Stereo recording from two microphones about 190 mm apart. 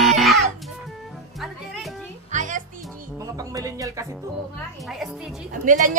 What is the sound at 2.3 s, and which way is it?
Music, 40° right (ahead or behind).